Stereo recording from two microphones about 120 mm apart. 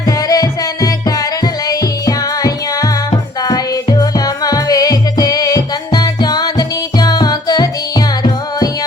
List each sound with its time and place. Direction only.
0.3 s music: 30° left (ahead or behind)